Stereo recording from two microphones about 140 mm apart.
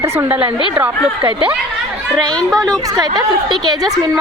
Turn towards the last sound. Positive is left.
turn(degrees=-30)  # may be behind; listen again after turning